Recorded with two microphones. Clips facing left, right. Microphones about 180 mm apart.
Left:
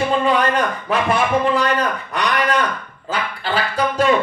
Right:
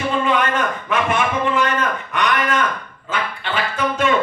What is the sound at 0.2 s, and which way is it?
A man's voice, 35° left (ahead or behind).